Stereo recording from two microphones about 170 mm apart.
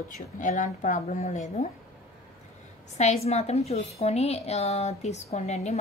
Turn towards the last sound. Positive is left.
turn(degrees=40)  # may be behind; listen again after turning